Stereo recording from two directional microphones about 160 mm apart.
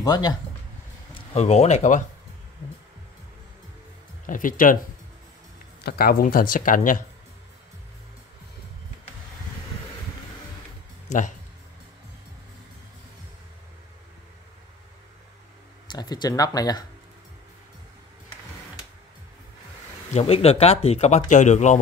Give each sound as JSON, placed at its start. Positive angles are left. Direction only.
{"t": 0.0, "sound": "speech", "side_deg": 25}
{"t": 1.3, "sound": "speech", "side_deg": 45}
{"t": 4.3, "sound": "speech", "side_deg": 60}
{"t": 5.8, "sound": "speech", "side_deg": 80}
{"t": 11.1, "sound": "speech", "side_deg": 50}
{"t": 15.9, "sound": "speech", "side_deg": 25}
{"t": 20.2, "sound": "speech", "side_deg": 40}